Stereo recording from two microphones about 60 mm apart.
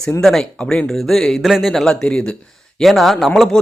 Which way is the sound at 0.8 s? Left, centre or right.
Centre.